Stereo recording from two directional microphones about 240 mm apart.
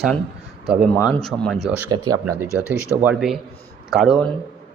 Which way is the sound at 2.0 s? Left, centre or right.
Right.